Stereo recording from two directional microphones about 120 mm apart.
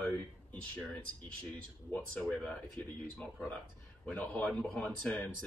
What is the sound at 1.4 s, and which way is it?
Speech, 15° left (ahead or behind).